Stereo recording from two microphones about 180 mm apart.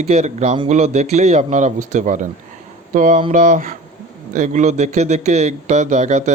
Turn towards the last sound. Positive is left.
turn(degrees=-40)  # may be behind; listen again after turning